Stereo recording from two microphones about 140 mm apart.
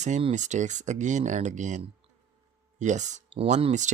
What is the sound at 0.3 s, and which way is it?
Speech, 60° right (ahead or behind).